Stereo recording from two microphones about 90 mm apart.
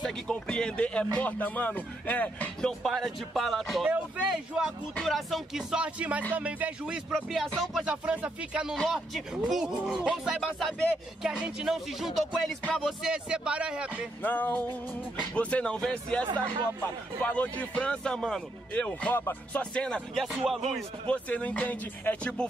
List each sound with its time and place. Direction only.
0.0 s speech: 10° left (ahead or behind)
2.8 s speech: centre (ahead or behind)
7.8 s speech: 10° right (ahead or behind)
8.8 s speech: centre (ahead or behind)
13.1 s speech: 10° right (ahead or behind)
14.2 s music: 20° left (ahead or behind)
15.3 s speech: 10° left (ahead or behind)
20.2 s speech: centre (ahead or behind)
21.1 s speech: 15° left (ahead or behind)